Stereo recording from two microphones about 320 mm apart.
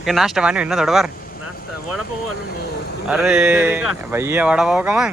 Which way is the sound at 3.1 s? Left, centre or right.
Centre.